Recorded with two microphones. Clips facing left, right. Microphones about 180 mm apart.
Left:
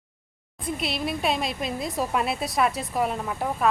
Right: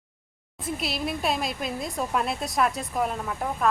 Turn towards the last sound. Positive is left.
turn(degrees=5)  # may be behind; listen again after turning